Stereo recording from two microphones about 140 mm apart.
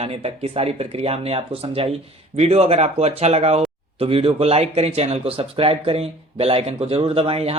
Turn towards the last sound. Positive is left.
turn(degrees=-45)  # may be behind; listen again after turning